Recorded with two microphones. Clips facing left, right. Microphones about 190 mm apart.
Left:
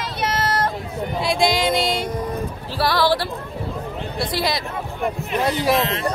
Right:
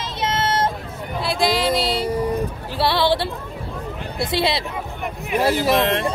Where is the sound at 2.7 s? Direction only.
25° right (ahead or behind).